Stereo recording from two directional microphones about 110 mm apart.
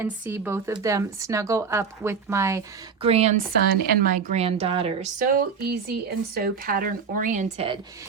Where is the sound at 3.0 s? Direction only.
75° right (ahead or behind).